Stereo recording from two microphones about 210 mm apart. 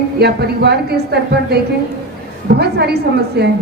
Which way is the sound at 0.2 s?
50° right (ahead or behind).